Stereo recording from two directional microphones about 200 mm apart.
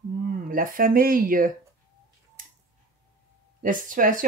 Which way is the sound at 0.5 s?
45° right (ahead or behind).